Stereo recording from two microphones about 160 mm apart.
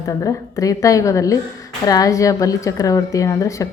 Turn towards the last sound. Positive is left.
turn(degrees=20)  # may be behind; listen again after turning